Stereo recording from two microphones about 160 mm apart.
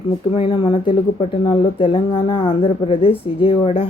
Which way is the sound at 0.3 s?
30° left (ahead or behind).